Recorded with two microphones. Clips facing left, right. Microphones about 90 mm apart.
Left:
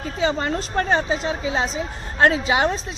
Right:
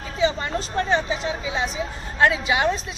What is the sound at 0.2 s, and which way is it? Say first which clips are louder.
Speech: even; 45° left (ahead or behind).